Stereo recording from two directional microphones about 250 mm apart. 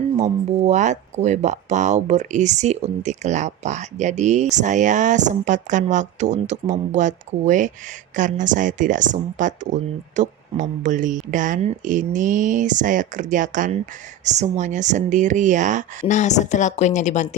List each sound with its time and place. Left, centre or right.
0.2 s speech: right
16.0 s a woman's voice: left